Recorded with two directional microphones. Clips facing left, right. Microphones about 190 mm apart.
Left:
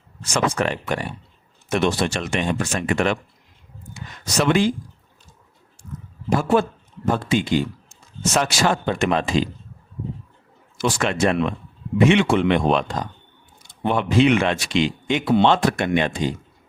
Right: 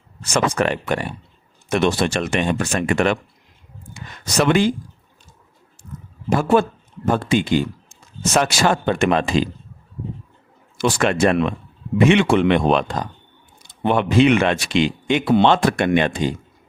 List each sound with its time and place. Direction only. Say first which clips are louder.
0.3 s speech: right 2 dB; 60° right (ahead or behind)
4.4 s speech: right 2 dB; 60° right (ahead or behind)
6.3 s speech: right 2 dB; 65° right (ahead or behind)
10.8 s speech: right 3 dB; 60° right (ahead or behind)
13.8 s speech: right 2 dB; 65° right (ahead or behind)